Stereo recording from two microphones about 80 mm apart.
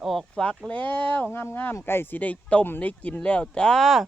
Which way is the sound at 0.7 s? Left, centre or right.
Centre.